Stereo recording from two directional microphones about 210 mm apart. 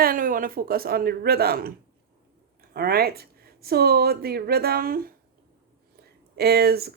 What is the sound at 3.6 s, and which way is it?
Speech, 45° right (ahead or behind).